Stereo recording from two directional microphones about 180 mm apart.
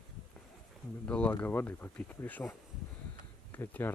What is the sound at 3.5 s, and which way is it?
Speech, 10° left (ahead or behind).